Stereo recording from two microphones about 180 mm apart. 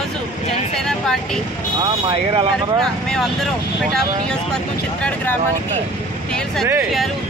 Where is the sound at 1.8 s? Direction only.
25° right (ahead or behind).